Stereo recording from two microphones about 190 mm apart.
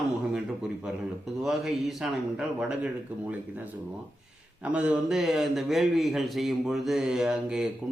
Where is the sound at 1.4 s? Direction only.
Centre (ahead or behind).